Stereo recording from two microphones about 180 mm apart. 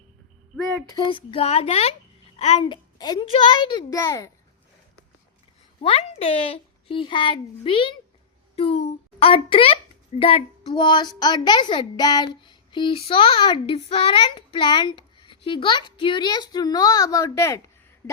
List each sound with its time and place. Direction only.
0.9 s a woman's voice: 25° left (ahead or behind)
5.8 s a child's voice: 30° left (ahead or behind); by 17.6 s 15° left (ahead or behind)